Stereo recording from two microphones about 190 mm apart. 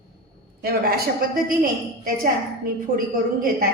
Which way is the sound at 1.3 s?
50° right (ahead or behind).